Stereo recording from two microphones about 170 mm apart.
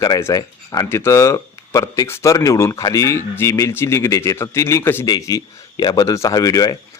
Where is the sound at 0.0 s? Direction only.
20° left (ahead or behind).